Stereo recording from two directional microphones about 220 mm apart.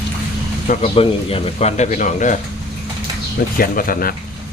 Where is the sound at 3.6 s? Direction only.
40° left (ahead or behind).